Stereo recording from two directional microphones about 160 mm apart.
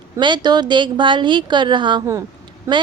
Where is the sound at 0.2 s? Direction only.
30° right (ahead or behind).